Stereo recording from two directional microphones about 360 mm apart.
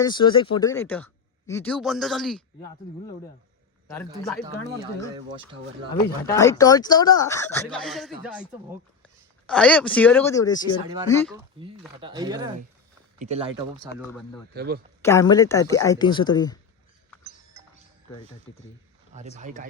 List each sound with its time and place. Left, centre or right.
0.0 s speech: centre
3.8 s speech: centre
5.1 s speech: centre
6.2 s speech: centre
9.5 s speech: centre
11.6 s speech: centre
14.1 s speech: centre
14.5 s speech: right
15.0 s speech: centre
19.1 s speech: centre